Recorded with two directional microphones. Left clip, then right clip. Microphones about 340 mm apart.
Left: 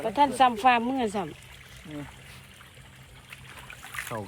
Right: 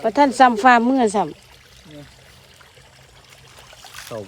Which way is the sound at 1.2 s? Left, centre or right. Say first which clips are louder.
Right 12 dB; centre.